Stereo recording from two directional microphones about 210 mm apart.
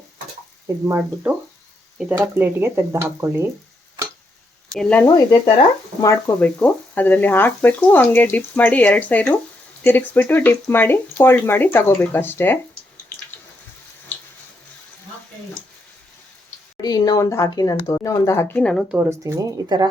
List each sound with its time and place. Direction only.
0.9 s speech: 10° right (ahead or behind)
4.7 s speech: 5° left (ahead or behind)
5.0 s speech: 20° left (ahead or behind)
16.8 s speech: 20° left (ahead or behind); by 19.0 s centre (ahead or behind)
19.2 s speech: 15° right (ahead or behind)